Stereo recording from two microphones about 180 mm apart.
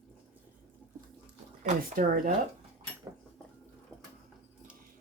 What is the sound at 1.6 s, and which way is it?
Speech, 40° right (ahead or behind).